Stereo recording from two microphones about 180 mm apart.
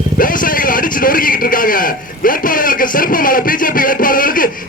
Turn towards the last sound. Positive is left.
turn(degrees=50)  # may be behind; listen again after turning